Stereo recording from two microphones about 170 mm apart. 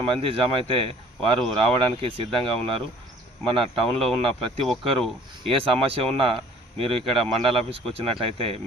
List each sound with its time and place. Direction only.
0.0 s speech: 35° right (ahead or behind)